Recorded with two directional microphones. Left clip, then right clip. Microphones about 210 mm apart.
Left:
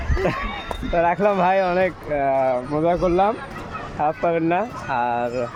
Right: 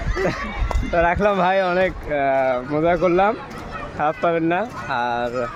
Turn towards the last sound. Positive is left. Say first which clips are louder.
# even
turn(degrees=5)  # may be behind; listen again after turning